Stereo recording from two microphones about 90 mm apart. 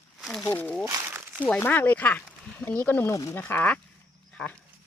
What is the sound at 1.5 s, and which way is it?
Speech, 20° left (ahead or behind).